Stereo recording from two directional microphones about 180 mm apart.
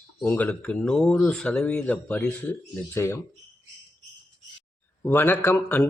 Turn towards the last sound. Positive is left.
turn(degrees=10)  # may be behind; listen again after turning